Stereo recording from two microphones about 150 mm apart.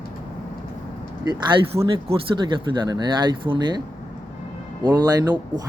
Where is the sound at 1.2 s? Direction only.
30° right (ahead or behind).